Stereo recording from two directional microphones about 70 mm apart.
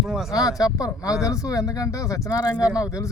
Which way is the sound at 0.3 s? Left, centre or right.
Left.